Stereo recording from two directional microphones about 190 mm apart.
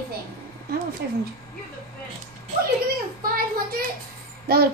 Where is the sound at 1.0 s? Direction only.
65° right (ahead or behind).